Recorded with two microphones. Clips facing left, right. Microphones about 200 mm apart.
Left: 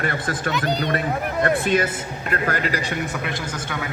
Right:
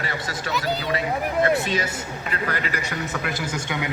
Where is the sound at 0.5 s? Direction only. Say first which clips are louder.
Even; 5° right (ahead or behind).